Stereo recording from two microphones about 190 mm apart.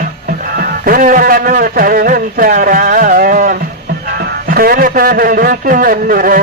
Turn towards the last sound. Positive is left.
turn(degrees=-50)  # may be behind; listen again after turning